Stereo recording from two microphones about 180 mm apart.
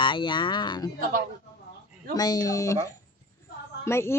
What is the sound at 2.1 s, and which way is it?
Speech, 20° left (ahead or behind).